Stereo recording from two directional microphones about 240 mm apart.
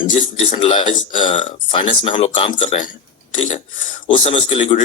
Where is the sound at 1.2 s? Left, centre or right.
Left.